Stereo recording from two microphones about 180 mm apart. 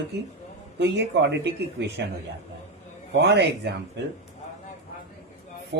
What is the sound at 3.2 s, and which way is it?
Speech, 70° right (ahead or behind).